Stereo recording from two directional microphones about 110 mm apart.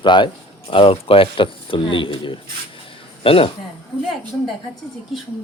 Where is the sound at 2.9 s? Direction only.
55° left (ahead or behind).